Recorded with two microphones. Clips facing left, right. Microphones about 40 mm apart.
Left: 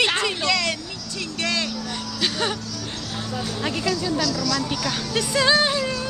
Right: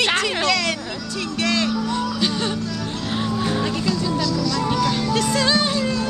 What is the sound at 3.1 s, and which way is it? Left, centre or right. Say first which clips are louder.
Music: right 9 dB; right.